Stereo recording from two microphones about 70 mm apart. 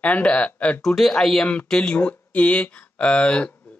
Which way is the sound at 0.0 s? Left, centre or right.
Centre.